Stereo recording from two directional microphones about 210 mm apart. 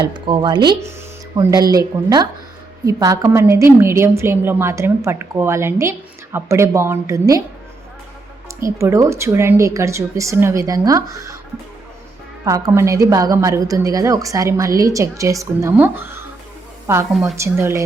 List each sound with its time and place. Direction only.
0.0 s a woman's voice: 20° right (ahead or behind)
8.6 s a woman's voice: 15° right (ahead or behind)
12.5 s a woman's voice: 15° right (ahead or behind)